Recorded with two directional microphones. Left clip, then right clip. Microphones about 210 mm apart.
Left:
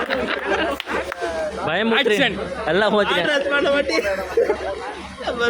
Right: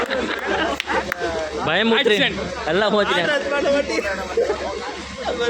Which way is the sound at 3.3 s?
45° left (ahead or behind).